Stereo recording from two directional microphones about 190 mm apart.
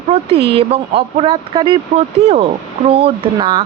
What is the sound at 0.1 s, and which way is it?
Speech, 30° right (ahead or behind).